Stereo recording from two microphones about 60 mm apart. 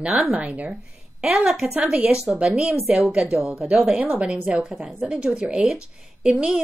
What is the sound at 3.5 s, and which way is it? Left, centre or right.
A woman's voice, centre.